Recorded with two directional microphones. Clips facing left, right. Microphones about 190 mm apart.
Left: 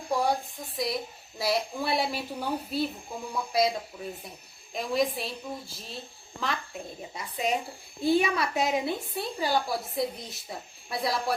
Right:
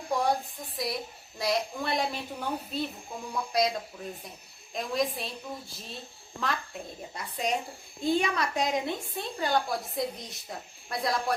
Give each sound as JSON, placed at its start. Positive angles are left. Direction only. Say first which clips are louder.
{"t": 0.1, "sound": "a sound", "louder": "left 1 dB", "side_deg": 0}
{"t": 0.8, "sound": "a woman's voice", "louder": "left 3 dB", "side_deg": 0}
{"t": 7.1, "sound": "a woman's voice", "louder": "left 2 dB", "side_deg": 0}